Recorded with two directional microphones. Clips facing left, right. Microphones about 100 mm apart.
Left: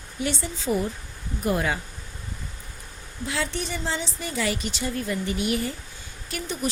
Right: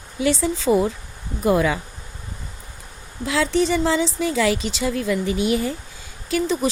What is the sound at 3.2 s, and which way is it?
A woman's voice, 90° right.